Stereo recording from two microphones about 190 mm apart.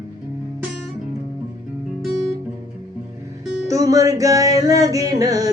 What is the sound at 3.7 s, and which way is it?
Music, 20° right (ahead or behind).